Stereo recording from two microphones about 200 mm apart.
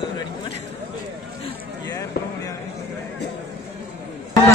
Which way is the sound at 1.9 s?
15° left (ahead or behind).